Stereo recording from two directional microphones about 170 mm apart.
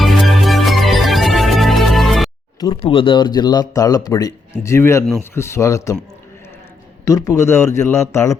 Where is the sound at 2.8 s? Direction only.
30° left (ahead or behind).